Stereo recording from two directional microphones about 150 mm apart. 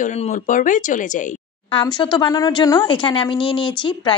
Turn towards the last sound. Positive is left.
turn(degrees=35)  # may be behind; listen again after turning